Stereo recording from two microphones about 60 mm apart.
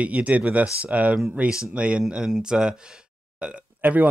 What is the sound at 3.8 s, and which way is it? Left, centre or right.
Speech, right.